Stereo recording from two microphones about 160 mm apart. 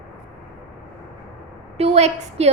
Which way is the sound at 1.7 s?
40° right (ahead or behind).